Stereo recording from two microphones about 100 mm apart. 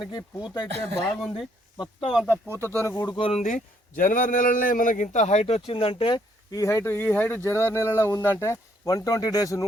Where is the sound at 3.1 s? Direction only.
55° left (ahead or behind).